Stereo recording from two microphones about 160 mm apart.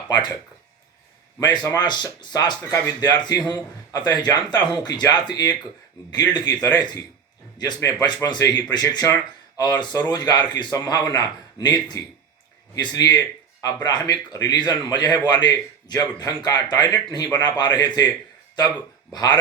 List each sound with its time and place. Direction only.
0.1 s speech: 25° left (ahead or behind)
1.4 s speech: 25° left (ahead or behind)